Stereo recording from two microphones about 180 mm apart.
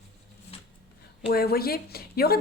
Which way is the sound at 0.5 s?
35° left (ahead or behind).